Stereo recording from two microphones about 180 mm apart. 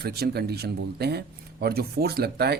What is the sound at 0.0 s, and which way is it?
Speech, 60° right (ahead or behind).